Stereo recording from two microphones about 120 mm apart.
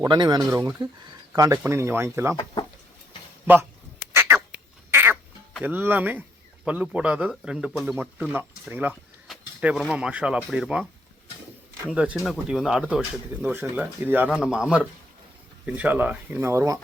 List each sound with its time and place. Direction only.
0.0 s speech: 35° right (ahead or behind)
2.3 s speech: 35° left (ahead or behind)
3.4 s speech: 15° right (ahead or behind)
4.1 s cat: 15° right (ahead or behind)
5.6 s speech: 15° right (ahead or behind)
7.9 s speech: 15° right (ahead or behind)
9.2 s a sound: 5° right (ahead or behind)
9.9 s speech: 10° right (ahead or behind)
11.9 s speech: 5° right (ahead or behind); by 16.8 s 25° right (ahead or behind)